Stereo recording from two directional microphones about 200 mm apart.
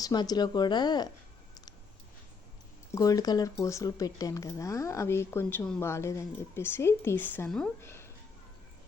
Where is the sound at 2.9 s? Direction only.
15° left (ahead or behind).